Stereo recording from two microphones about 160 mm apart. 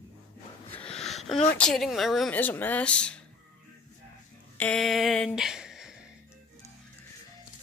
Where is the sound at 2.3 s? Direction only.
10° left (ahead or behind).